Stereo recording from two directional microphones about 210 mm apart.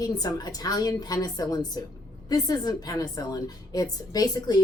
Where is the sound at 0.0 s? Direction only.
20° left (ahead or behind).